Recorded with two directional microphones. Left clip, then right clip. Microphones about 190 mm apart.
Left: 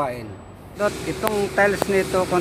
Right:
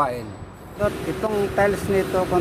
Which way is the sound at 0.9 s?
45° right (ahead or behind).